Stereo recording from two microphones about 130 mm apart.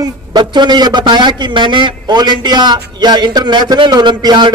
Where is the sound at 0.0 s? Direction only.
35° right (ahead or behind).